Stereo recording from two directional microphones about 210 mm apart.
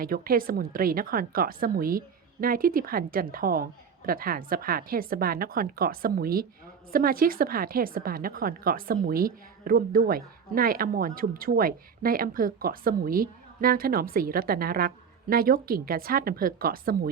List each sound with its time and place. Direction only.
0.0 s a woman's voice: 45° right (ahead or behind)